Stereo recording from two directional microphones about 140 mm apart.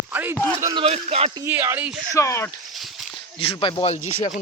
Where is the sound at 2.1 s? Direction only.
20° left (ahead or behind).